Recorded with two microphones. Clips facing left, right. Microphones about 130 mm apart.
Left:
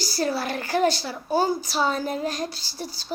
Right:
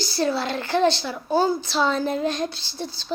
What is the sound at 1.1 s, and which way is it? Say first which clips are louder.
Speech: right 2 dB; 5° left (ahead or behind).